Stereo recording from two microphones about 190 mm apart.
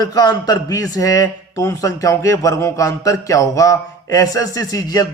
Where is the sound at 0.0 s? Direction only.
20° left (ahead or behind).